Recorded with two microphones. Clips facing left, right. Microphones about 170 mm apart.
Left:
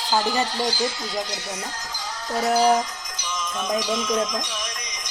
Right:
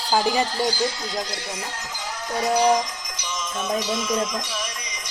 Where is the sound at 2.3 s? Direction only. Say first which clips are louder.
Left 1 dB; 5° left (ahead or behind).